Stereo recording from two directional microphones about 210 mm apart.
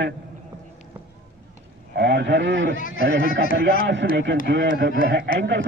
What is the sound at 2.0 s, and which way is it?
Speech, 55° right (ahead or behind).